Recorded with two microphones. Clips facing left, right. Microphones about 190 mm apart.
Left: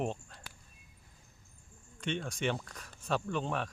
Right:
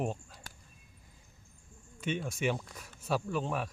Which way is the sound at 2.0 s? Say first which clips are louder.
Right 1 dB; 5° right (ahead or behind).